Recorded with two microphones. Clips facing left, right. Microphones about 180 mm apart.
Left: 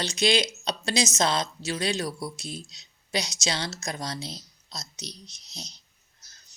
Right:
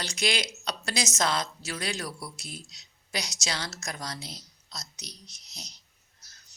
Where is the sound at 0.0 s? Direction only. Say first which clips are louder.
Left 6 dB; 25° left (ahead or behind).